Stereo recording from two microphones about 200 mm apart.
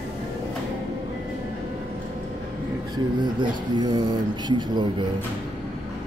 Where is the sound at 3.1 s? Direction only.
20° right (ahead or behind).